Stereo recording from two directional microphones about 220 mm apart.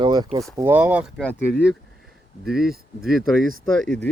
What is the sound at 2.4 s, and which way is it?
Speech, centre (ahead or behind).